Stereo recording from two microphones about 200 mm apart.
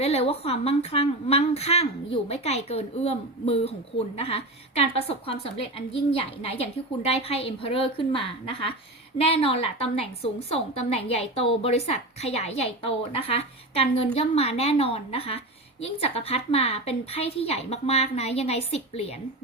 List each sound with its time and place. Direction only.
0.0 s a woman's voice: 30° left (ahead or behind)